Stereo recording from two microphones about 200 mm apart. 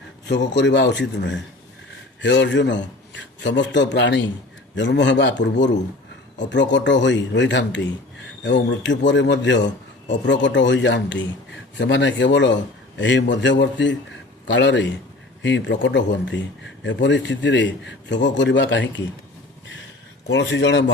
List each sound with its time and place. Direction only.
0.3 s a man's voice: 60° left (ahead or behind)
20.2 s a man's voice: 60° left (ahead or behind)